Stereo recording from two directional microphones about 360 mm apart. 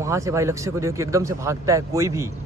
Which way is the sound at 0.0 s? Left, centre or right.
Centre.